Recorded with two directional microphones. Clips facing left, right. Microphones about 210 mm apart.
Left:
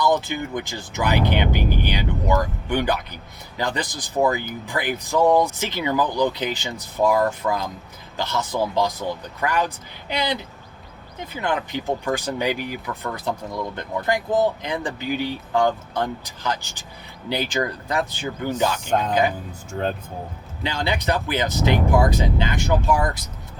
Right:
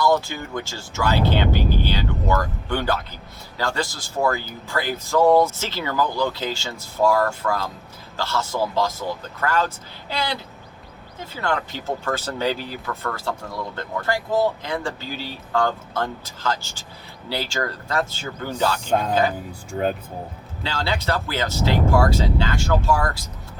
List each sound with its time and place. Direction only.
0.0 s speech: 20° left (ahead or behind)
18.9 s speech: 10° right (ahead or behind)
20.7 s speech: 20° left (ahead or behind)